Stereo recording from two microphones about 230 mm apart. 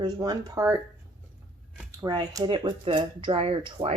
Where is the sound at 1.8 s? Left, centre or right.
Centre.